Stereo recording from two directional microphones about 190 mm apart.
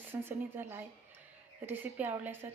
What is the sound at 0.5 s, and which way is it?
Speech, 10° right (ahead or behind).